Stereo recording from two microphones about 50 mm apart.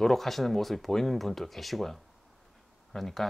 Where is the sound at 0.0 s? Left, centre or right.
Centre.